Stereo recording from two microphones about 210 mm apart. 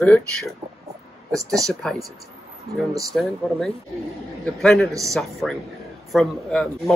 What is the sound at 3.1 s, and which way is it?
Speech, centre (ahead or behind).